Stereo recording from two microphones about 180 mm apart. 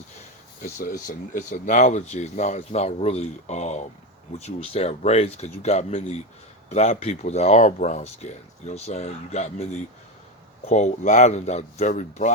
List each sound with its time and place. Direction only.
0.6 s speech: 50° left (ahead or behind)